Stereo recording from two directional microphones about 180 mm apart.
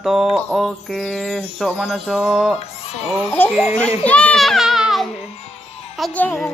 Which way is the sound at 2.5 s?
35° left (ahead or behind).